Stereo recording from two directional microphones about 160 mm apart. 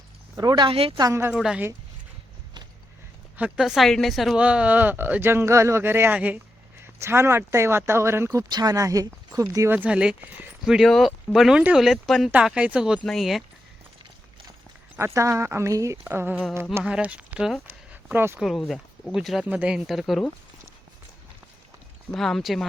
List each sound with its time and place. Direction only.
0.3 s speech: 25° right (ahead or behind)
1.0 s speech: 20° right (ahead or behind)
1.3 s speech: 5° right (ahead or behind)
3.3 s speech: 5° right (ahead or behind)
14.9 s speech: 15° right (ahead or behind)
18.3 s speech: centre (ahead or behind)
22.1 s speech: centre (ahead or behind)